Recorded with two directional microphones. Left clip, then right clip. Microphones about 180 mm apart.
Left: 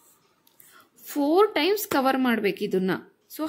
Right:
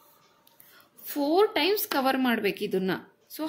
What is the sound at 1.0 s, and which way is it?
A woman's voice, 50° left (ahead or behind).